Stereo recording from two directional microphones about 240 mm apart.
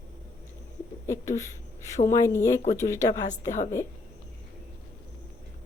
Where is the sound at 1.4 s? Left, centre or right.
Centre.